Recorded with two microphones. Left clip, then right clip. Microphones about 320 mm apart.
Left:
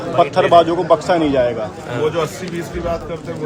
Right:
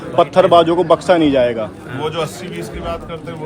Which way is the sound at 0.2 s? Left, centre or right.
Right.